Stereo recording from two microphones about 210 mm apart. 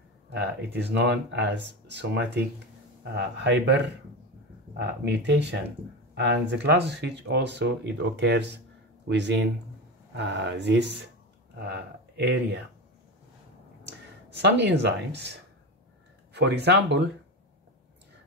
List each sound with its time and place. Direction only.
0.3 s speech: 55° right (ahead or behind)
5.0 s speech: 55° right (ahead or behind)
14.3 s speech: 55° right (ahead or behind)
16.3 s speech: 55° right (ahead or behind)